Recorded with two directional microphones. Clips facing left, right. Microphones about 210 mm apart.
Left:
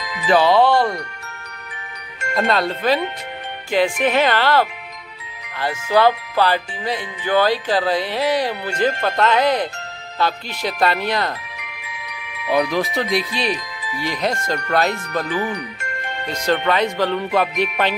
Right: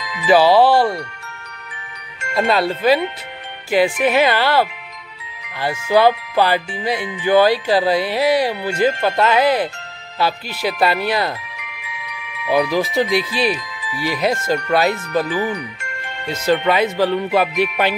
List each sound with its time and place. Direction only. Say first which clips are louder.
0.3 s speech: right 3 dB; 5° right (ahead or behind)
2.3 s speech: right 2 dB; 5° right (ahead or behind)
3.7 s music: right 2 dB; 10° right (ahead or behind)
11.5 s wind chime: right 1 dB; 40° left (ahead or behind)
12.4 s speech: right 2 dB; 5° right (ahead or behind)
13.6 s music: even; 40° left (ahead or behind)
14.0 s speech: right 4 dB; 5° right (ahead or behind)
15.8 s music: left 2 dB; 40° left (ahead or behind)
16.4 s music: right 2 dB; 5° right (ahead or behind)